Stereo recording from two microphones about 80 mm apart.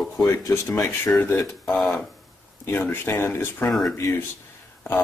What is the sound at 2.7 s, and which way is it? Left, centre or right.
Speech, left.